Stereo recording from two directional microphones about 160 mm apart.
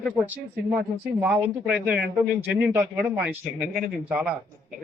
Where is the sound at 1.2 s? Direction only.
10° right (ahead or behind).